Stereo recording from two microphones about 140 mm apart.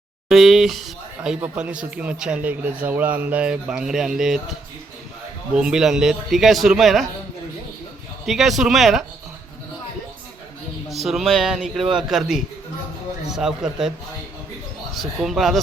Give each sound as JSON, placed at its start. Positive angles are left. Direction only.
{"t": 0.3, "sound": "speech", "side_deg": 0}
{"t": 5.5, "sound": "a man's voice", "side_deg": -5}
{"t": 8.3, "sound": "a man's voice", "side_deg": 0}
{"t": 10.8, "sound": "a man's voice", "side_deg": 0}
{"t": 14.9, "sound": "a man's voice", "side_deg": 0}